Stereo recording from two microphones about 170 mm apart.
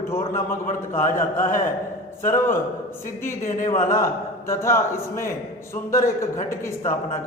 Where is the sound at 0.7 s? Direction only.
50° left (ahead or behind).